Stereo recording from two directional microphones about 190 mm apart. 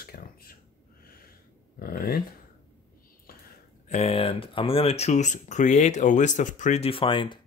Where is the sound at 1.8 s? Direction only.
50° left (ahead or behind).